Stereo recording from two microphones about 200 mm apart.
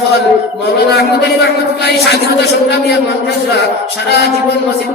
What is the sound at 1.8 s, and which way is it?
Speech, 55° left (ahead or behind).